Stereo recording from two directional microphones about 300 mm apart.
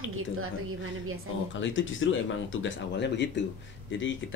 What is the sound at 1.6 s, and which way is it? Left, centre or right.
Speech, left.